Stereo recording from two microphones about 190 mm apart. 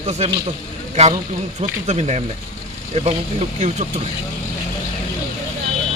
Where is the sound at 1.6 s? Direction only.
35° right (ahead or behind).